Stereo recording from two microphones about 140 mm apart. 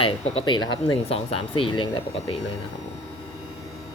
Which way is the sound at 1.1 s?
45° left (ahead or behind).